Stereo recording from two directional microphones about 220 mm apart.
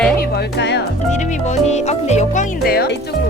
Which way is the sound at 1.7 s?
30° left (ahead or behind).